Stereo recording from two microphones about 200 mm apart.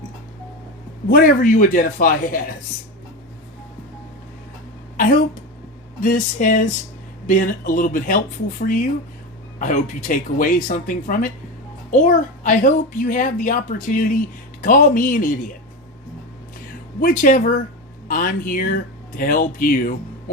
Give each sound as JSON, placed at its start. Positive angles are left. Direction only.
{"t": 1.1, "sound": "speech", "side_deg": 45}
{"t": 4.9, "sound": "a sound", "side_deg": 40}
{"t": 6.0, "sound": "a child's voice", "side_deg": 40}
{"t": 17.0, "sound": "speech", "side_deg": 45}